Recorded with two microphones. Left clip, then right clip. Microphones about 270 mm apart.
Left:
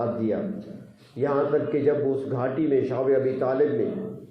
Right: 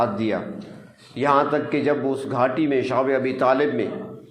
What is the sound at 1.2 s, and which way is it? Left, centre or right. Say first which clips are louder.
A man's voice: right 4 dB; right.